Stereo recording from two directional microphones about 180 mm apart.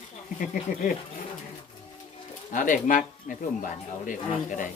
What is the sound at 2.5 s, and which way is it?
Speech, 45° left (ahead or behind).